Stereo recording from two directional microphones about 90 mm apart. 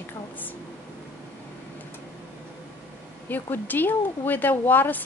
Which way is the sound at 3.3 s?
20° left (ahead or behind).